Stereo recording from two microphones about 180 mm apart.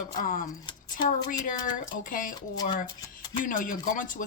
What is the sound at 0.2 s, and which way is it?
Speech, 50° left (ahead or behind).